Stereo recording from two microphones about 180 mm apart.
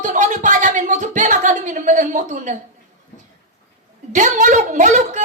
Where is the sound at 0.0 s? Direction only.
45° right (ahead or behind).